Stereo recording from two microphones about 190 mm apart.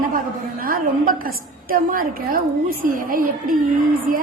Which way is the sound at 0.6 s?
45° right (ahead or behind).